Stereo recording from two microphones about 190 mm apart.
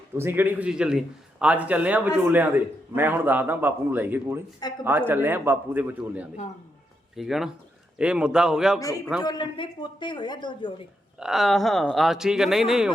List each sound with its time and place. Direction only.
0.2 s a man's voice: 10° right (ahead or behind)
9.2 s speech: 25° left (ahead or behind)
11.2 s speech: centre (ahead or behind)